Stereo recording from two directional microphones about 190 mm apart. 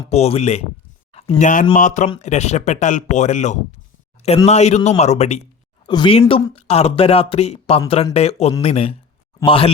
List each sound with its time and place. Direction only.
0.1 s speech: 35° left (ahead or behind)
5.8 s speech: 25° left (ahead or behind)